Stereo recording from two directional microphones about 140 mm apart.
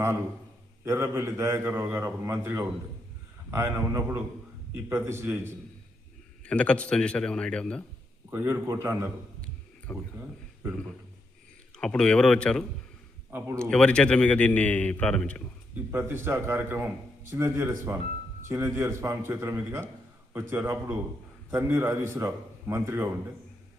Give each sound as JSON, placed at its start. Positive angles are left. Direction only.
{"t": 0.9, "sound": "a man's voice", "side_deg": -20}
{"t": 6.4, "sound": "a man's voice", "side_deg": 5}
{"t": 8.3, "sound": "a man's voice", "side_deg": -15}
{"t": 9.4, "sound": "a sound", "side_deg": 10}
{"t": 10.7, "sound": "a man's voice", "side_deg": 5}
{"t": 15.7, "sound": "a man's voice", "side_deg": -20}